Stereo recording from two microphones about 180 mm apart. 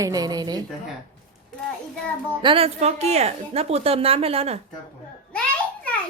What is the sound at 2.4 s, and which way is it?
A woman's voice, 30° right (ahead or behind).